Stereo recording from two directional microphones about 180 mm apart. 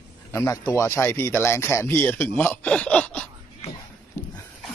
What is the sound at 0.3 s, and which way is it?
Speech, 15° left (ahead or behind).